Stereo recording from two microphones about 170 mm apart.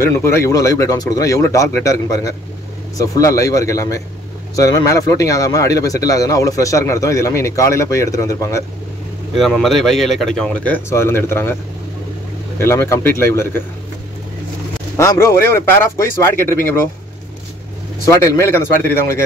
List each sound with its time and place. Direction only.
0.0 s a man's voice: 15° left (ahead or behind)
9.4 s speech: centre (ahead or behind)
12.5 s speech: 15° left (ahead or behind)
15.0 s speech: 15° left (ahead or behind)
18.1 s speech: 15° left (ahead or behind)